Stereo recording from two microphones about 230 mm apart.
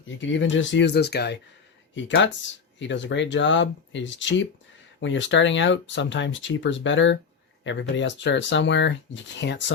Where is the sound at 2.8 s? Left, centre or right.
Left.